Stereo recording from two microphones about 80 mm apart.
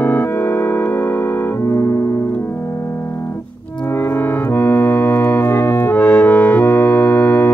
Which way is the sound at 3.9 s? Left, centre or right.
Left.